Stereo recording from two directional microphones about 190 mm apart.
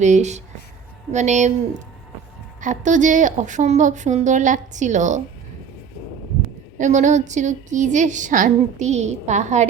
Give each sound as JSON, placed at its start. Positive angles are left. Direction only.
{"t": 0.0, "sound": "a woman's voice", "side_deg": -40}
{"t": 2.6, "sound": "a woman's voice", "side_deg": -40}
{"t": 6.7, "sound": "a woman's voice", "side_deg": -40}